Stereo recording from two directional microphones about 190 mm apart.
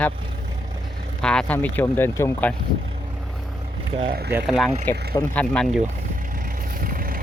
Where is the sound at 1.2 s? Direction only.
5° left (ahead or behind).